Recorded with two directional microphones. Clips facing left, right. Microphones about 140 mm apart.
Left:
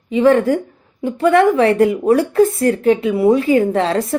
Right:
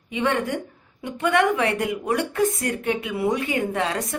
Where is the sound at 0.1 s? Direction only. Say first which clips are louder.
Left 11 dB; 35° left (ahead or behind).